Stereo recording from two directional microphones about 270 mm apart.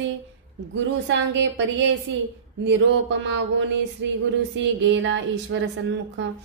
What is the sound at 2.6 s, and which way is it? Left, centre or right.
Mantra, right.